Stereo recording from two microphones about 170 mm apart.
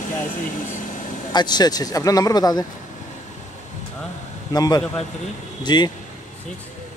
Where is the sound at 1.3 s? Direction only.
25° left (ahead or behind).